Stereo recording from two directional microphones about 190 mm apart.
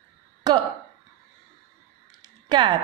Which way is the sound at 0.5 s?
20° right (ahead or behind).